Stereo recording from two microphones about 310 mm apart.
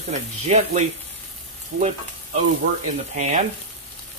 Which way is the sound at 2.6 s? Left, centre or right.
Right.